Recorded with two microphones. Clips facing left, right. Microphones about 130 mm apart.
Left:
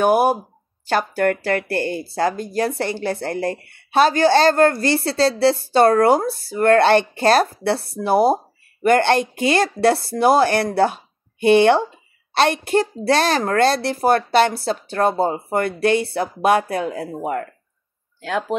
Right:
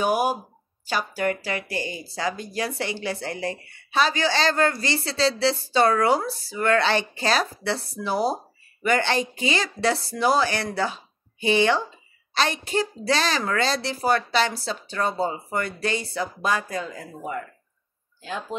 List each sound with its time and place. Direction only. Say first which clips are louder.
0.0 s speech: left 7 dB; 60° left (ahead or behind); by 18.6 s 75° left (ahead or behind)